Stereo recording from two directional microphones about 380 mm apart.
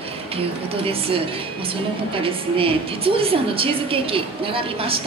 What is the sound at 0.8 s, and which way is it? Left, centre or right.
Speech, centre.